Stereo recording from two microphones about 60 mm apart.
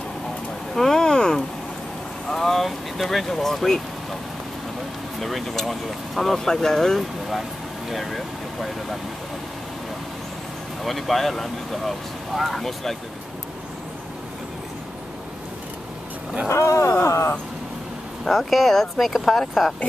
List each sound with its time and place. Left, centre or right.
0.7 s a sound: centre
2.2 s speech: centre
5.2 s speech: centre
10.8 s speech: centre
16.4 s speech: left
18.2 s speech: centre